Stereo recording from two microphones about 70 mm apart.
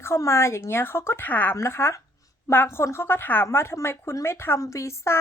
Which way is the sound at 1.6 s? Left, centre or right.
Left.